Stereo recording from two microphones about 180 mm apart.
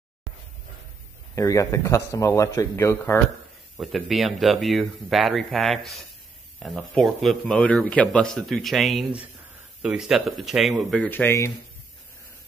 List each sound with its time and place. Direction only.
1.3 s speech: 15° left (ahead or behind)
3.8 s a man's voice: centre (ahead or behind)
11.1 s speech: 10° left (ahead or behind)